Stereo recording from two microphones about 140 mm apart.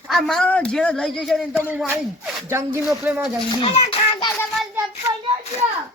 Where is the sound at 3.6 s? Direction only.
45° left (ahead or behind).